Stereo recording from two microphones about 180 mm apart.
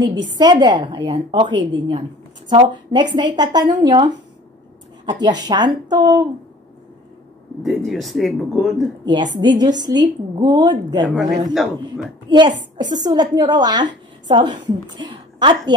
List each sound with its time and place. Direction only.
0.1 s a woman's voice: 25° right (ahead or behind)
5.2 s a woman's voice: 25° right (ahead or behind)
7.6 s speech: centre (ahead or behind)
9.6 s a woman's voice: 25° right (ahead or behind)
11.1 s speech: centre (ahead or behind)
12.3 s a woman's voice: 25° right (ahead or behind)